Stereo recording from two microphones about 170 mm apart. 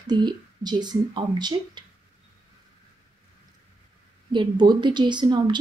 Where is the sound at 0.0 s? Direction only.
25° right (ahead or behind).